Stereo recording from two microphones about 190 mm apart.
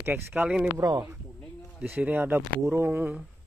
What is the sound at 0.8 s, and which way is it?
A man's voice, 15° right (ahead or behind).